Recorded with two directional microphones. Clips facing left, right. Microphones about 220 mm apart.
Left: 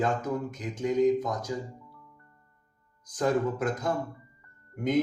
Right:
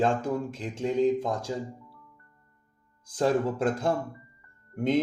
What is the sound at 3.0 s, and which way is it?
Speech, 30° right (ahead or behind).